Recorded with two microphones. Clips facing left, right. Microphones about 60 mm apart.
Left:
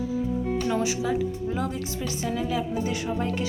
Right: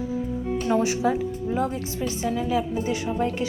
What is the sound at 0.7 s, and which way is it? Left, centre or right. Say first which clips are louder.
Speech: right 7 dB; right.